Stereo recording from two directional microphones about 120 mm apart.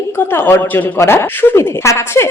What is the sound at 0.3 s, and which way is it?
Speech, 15° left (ahead or behind).